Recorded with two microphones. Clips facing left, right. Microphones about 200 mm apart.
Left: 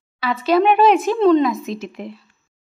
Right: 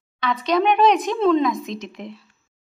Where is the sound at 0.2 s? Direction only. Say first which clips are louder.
Left 4 dB; 5° left (ahead or behind).